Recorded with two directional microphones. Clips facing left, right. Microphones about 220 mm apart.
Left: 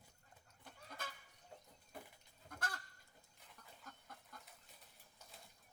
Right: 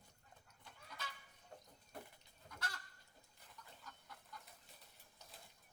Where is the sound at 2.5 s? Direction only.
50° left (ahead or behind).